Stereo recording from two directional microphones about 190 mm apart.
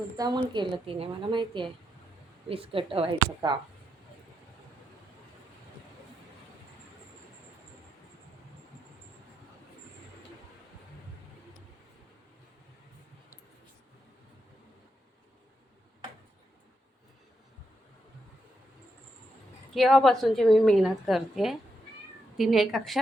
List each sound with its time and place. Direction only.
0.2 s a woman's voice: 25° right (ahead or behind)
19.7 s a woman's voice: centre (ahead or behind)